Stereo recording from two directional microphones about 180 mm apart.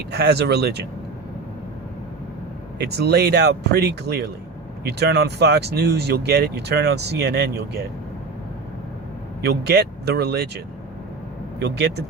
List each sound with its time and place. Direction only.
0.1 s speech: 65° right (ahead or behind)
2.7 s speech: 65° right (ahead or behind)
9.4 s speech: 65° right (ahead or behind)
11.6 s speech: 65° right (ahead or behind)